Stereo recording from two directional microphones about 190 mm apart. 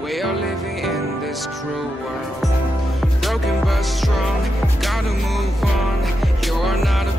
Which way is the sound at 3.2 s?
Centre (ahead or behind).